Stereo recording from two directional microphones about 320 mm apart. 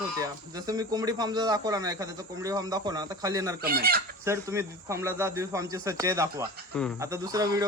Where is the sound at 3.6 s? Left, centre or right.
Right.